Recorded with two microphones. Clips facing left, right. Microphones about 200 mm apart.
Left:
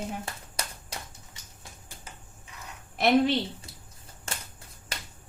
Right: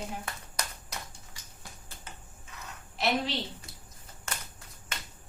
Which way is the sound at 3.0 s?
55° left (ahead or behind).